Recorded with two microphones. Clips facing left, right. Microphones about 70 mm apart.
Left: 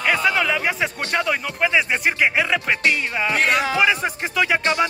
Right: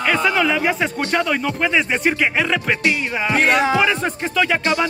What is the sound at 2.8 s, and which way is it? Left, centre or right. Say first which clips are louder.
Music: right 1 dB; centre.